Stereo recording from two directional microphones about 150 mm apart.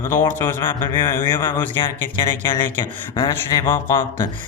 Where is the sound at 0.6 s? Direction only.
30° left (ahead or behind).